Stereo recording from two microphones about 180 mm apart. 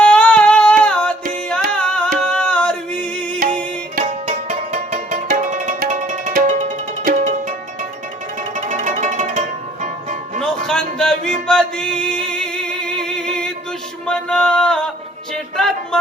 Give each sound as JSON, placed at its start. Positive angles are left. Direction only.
{"t": 0.0, "sound": "music", "side_deg": 5}
{"t": 3.9, "sound": "music", "side_deg": -40}
{"t": 8.5, "sound": "music", "side_deg": -40}
{"t": 10.4, "sound": "a sound", "side_deg": 5}
{"t": 11.4, "sound": "music", "side_deg": 5}
{"t": 15.5, "sound": "a sound", "side_deg": 0}